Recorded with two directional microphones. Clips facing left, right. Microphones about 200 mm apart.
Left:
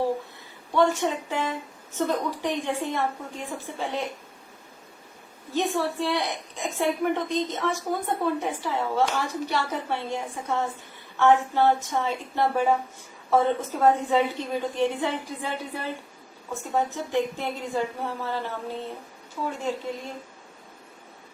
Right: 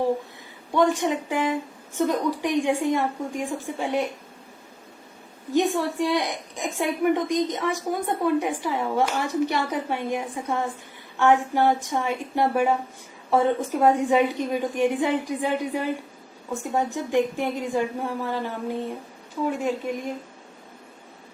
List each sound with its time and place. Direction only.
0.7 s a woman's voice: 15° right (ahead or behind)
5.7 s a woman's voice: 15° right (ahead or behind)